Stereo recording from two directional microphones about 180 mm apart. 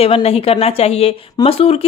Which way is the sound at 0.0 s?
35° left (ahead or behind).